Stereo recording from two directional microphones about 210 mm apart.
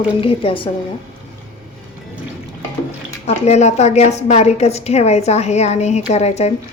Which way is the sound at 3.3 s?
30° left (ahead or behind).